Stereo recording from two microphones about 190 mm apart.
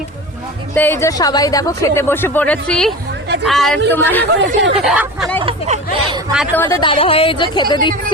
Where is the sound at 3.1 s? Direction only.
60° right (ahead or behind).